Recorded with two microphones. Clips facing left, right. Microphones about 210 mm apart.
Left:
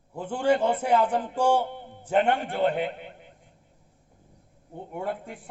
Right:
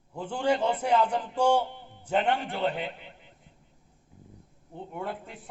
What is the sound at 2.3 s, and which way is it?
A man's voice, 55° left (ahead or behind).